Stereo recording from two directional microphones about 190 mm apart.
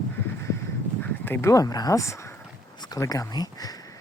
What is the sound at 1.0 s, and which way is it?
Speech, 10° left (ahead or behind).